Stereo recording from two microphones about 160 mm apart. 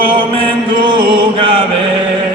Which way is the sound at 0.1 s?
35° right (ahead or behind).